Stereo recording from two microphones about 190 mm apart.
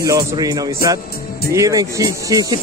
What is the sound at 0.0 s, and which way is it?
Speech, 20° right (ahead or behind).